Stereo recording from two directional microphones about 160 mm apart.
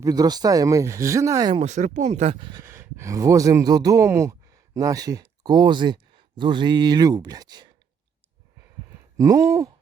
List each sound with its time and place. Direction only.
0.0 s speech: 25° right (ahead or behind)
1.6 s speech: 50° right (ahead or behind)
2.4 s speech: 25° right (ahead or behind)
9.1 s speech: 20° right (ahead or behind)